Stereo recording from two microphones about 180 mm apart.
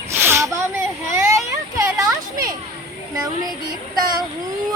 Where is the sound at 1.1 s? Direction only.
15° right (ahead or behind).